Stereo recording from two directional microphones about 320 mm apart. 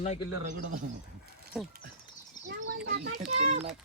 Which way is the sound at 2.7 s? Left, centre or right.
Right.